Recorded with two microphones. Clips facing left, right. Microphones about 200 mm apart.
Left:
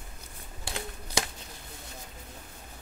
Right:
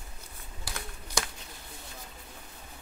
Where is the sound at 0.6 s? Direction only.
25° left (ahead or behind).